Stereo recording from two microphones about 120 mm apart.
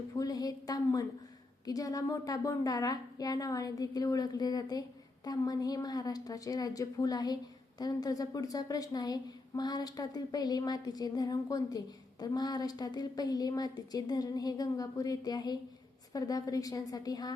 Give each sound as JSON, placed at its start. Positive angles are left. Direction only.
{"t": 0.2, "sound": "a woman's voice", "side_deg": 30}